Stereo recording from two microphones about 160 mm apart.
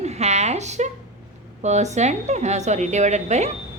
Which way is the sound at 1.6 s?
45° right (ahead or behind).